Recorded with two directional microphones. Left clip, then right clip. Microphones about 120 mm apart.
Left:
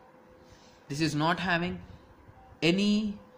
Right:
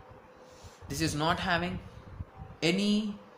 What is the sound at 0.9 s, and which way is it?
Speech, 50° left (ahead or behind).